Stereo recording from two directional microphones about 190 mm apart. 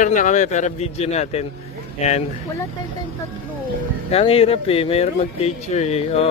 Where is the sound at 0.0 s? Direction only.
40° left (ahead or behind).